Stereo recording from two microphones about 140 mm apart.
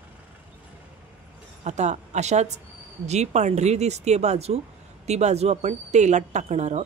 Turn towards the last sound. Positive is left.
turn(degrees=-55)  # may be behind; listen again after turning